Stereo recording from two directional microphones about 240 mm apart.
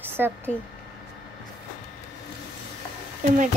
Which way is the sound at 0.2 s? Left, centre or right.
Centre.